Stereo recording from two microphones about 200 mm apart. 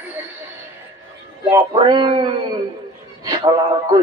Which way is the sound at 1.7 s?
25° right (ahead or behind).